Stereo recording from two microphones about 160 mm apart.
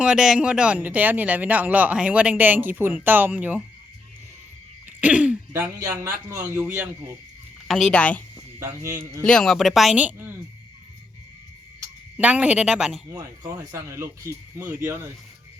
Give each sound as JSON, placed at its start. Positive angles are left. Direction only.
{"t": 0.0, "sound": "speech", "side_deg": -5}
{"t": 4.9, "sound": "speech", "side_deg": -10}
{"t": 7.7, "sound": "a woman's voice", "side_deg": 5}
{"t": 8.5, "sound": "speech", "side_deg": -15}
{"t": 9.2, "sound": "speech", "side_deg": 5}
{"t": 12.1, "sound": "speech", "side_deg": -10}
{"t": 13.1, "sound": "speech", "side_deg": -20}